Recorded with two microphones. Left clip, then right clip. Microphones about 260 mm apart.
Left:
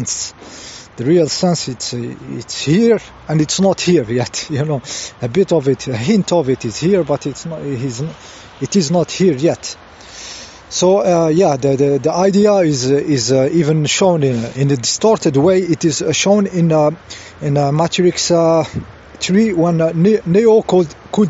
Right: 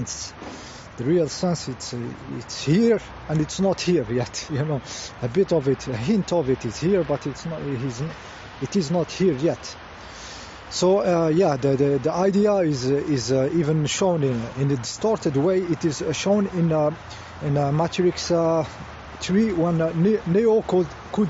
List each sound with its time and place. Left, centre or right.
0.0 s speech: left